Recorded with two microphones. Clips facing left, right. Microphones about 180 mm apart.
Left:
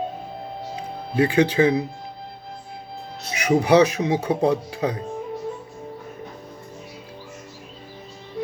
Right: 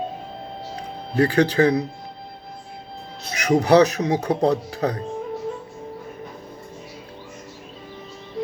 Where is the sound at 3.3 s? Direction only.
10° left (ahead or behind).